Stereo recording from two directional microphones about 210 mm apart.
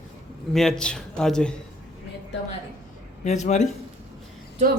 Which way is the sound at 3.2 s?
35° left (ahead or behind).